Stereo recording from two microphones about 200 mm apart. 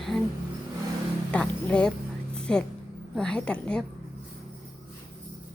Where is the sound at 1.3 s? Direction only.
5° left (ahead or behind).